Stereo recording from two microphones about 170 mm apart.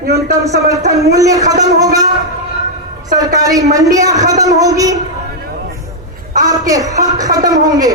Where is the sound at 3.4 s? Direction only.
20° right (ahead or behind).